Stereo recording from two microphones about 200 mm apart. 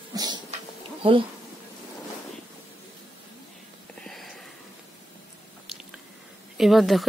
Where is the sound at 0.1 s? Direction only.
20° right (ahead or behind).